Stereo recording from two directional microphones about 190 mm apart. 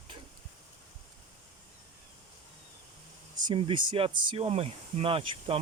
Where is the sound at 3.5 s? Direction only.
25° right (ahead or behind).